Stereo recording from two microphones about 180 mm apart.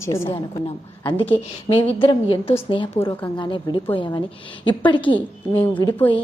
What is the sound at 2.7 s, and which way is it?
A woman's voice, 30° left (ahead or behind).